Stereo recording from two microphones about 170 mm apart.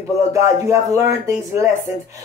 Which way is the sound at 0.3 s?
20° right (ahead or behind).